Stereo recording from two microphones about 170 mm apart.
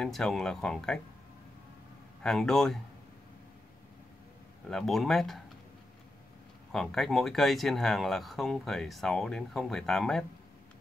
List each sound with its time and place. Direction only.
0.0 s speech: centre (ahead or behind)
2.2 s speech: 5° left (ahead or behind)
4.6 s speech: centre (ahead or behind)
6.7 s speech: centre (ahead or behind)